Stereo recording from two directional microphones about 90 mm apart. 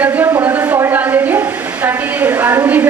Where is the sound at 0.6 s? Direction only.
35° right (ahead or behind).